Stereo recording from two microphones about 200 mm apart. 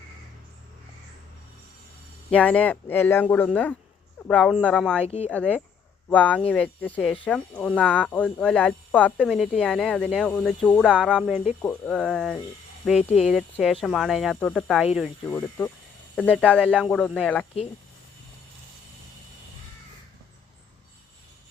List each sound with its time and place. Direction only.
2.3 s speech: 5° left (ahead or behind)
5.0 s speech: 30° left (ahead or behind)
5.3 s speech: 5° left (ahead or behind)
13.0 s speech: 30° left (ahead or behind)
13.2 s speech: centre (ahead or behind)